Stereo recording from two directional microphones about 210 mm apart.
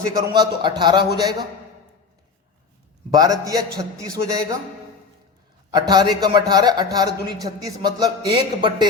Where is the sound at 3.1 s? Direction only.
20° right (ahead or behind).